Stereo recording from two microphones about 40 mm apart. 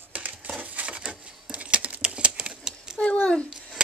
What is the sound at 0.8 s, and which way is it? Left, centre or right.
Patter, right.